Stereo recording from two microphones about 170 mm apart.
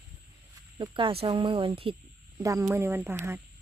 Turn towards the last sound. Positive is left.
turn(degrees=-15)  # may be behind; listen again after turning